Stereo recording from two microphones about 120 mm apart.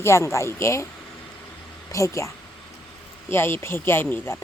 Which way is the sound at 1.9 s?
25° left (ahead or behind).